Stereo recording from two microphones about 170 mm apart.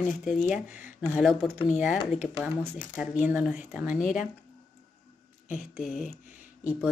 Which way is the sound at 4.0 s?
50° left (ahead or behind).